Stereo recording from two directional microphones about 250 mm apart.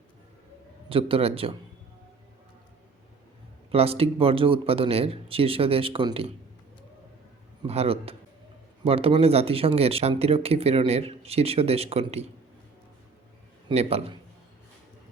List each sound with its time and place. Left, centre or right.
0.9 s speech: right
3.7 s speech: right
7.7 s speech: right
13.7 s speech: right